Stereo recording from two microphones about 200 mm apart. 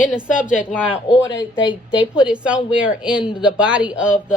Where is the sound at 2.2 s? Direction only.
5° right (ahead or behind).